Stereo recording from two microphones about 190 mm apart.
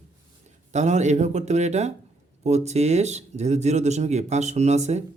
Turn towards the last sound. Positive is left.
turn(degrees=-35)  # may be behind; listen again after turning